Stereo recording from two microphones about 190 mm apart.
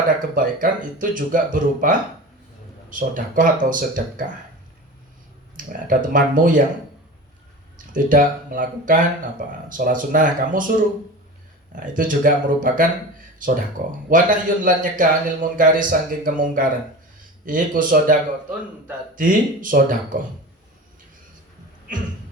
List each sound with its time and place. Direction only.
0.3 s a man's voice: 45° right (ahead or behind)
5.5 s a man's voice: 45° right (ahead or behind)
7.9 s a man's voice: 45° right (ahead or behind)
11.7 s a man's voice: 45° right (ahead or behind)